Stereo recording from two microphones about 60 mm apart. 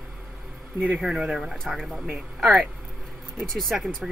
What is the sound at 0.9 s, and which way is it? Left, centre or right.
Speech, centre.